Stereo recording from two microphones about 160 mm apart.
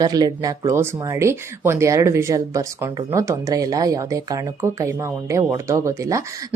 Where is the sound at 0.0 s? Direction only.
25° right (ahead or behind).